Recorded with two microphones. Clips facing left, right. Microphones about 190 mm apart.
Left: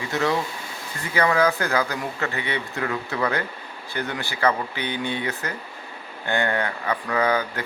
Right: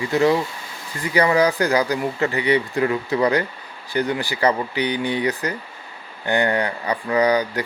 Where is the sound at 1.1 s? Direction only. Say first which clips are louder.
Right 3 dB; 15° right (ahead or behind).